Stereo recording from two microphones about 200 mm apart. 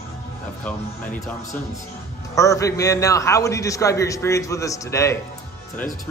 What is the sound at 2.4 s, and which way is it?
A man's voice, 15° left (ahead or behind).